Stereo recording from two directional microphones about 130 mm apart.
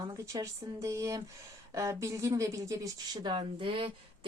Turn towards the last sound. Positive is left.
turn(degrees=-45)  # may be behind; listen again after turning